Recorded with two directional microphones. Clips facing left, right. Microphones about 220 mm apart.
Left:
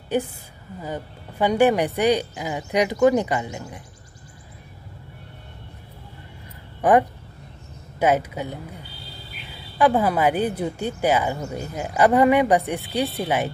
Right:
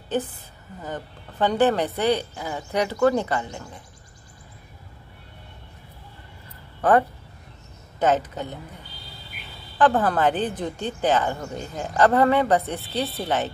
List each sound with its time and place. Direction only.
0.1 s speech: 10° left (ahead or behind)
6.8 s speech: 15° left (ahead or behind)
9.8 s speech: 10° left (ahead or behind)